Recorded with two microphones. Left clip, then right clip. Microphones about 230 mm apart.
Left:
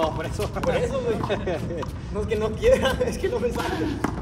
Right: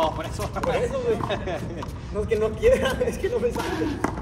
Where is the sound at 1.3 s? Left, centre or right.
Right.